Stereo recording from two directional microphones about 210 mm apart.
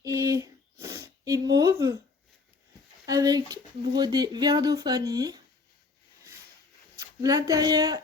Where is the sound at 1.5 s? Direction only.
15° right (ahead or behind).